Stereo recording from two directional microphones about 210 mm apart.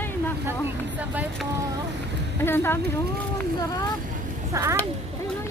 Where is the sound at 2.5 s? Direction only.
10° left (ahead or behind).